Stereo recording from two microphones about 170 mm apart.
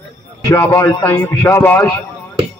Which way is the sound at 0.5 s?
20° left (ahead or behind).